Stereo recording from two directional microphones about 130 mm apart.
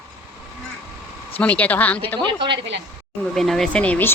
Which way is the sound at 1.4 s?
10° left (ahead or behind).